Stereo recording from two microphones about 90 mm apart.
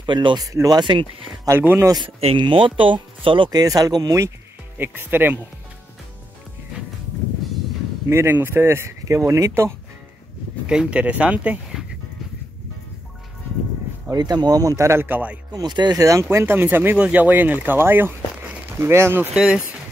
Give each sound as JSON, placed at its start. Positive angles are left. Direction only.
{"t": 0.0, "sound": "speech", "side_deg": -60}
{"t": 0.5, "sound": "speech", "side_deg": -35}
{"t": 0.7, "sound": "speech", "side_deg": -65}
{"t": 1.6, "sound": "speech", "side_deg": -20}
{"t": 2.1, "sound": "speech", "side_deg": -65}
{"t": 3.4, "sound": "speech", "side_deg": -45}
{"t": 4.7, "sound": "speech", "side_deg": -25}
{"t": 8.1, "sound": "speech", "side_deg": -25}
{"t": 10.7, "sound": "speech", "side_deg": -10}
{"t": 14.1, "sound": "speech", "side_deg": -50}
{"t": 15.5, "sound": "speech", "side_deg": -50}
{"t": 16.0, "sound": "speech", "side_deg": -35}
{"t": 19.3, "sound": "speech", "side_deg": -10}